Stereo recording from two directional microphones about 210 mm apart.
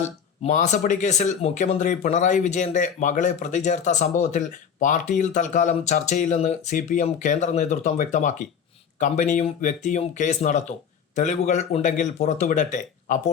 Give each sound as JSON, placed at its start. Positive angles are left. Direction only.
{"t": 0.4, "sound": "speech", "side_deg": 35}